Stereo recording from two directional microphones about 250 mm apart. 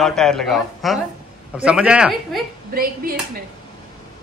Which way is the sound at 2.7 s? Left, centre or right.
Right.